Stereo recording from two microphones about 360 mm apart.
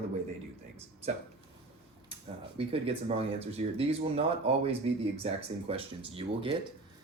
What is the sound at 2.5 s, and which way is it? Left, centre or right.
Speech, centre.